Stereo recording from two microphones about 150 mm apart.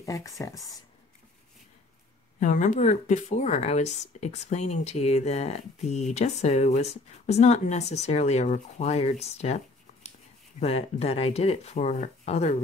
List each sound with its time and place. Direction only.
0.0 s speech: 20° left (ahead or behind)
2.4 s speech: 55° left (ahead or behind)
10.6 s speech: 45° left (ahead or behind)